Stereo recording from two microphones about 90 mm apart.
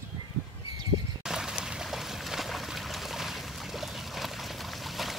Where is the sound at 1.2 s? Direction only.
5° right (ahead or behind).